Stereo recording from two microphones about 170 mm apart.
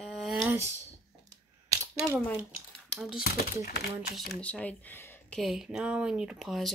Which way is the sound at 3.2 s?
65° left (ahead or behind).